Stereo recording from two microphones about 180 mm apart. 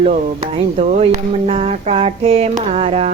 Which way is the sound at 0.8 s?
35° right (ahead or behind).